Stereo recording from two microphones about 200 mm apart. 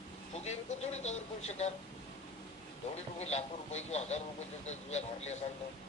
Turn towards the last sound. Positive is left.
turn(degrees=35)  # may be behind; listen again after turning